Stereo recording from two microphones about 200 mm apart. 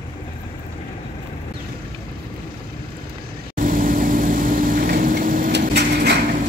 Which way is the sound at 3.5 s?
45° right (ahead or behind).